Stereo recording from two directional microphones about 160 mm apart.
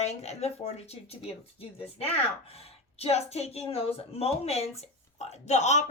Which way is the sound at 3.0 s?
40° left (ahead or behind).